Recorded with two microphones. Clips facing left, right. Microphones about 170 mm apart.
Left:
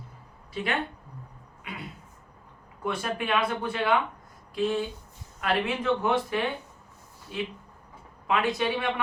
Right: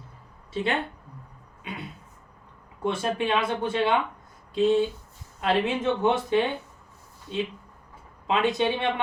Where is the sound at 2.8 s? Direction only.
25° right (ahead or behind).